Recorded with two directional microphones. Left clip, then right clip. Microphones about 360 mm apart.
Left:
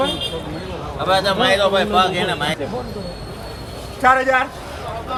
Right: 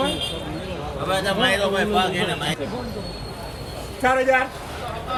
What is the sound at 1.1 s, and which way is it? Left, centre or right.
Speech, left.